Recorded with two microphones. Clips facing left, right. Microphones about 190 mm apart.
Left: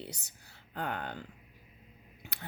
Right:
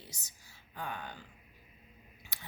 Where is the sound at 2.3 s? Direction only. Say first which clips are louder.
Left 6 dB; 60° left (ahead or behind).